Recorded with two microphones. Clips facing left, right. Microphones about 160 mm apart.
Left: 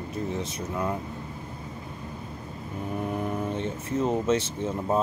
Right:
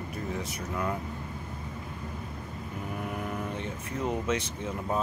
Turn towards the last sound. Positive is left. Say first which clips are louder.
# left 5 dB
turn(degrees=30)  # may be behind; listen again after turning